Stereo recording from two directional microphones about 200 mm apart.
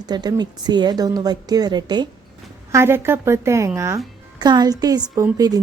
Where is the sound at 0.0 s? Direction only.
20° right (ahead or behind).